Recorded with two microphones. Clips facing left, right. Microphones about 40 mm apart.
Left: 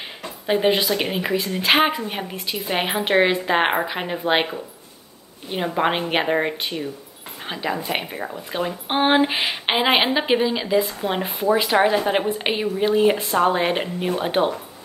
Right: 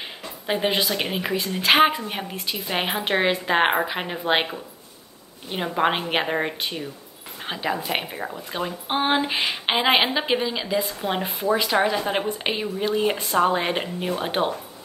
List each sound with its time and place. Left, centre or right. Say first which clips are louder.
0.5 s speech: left 4 dB; centre
8.8 s a woman's voice: left 4 dB; left; by 14.5 s centre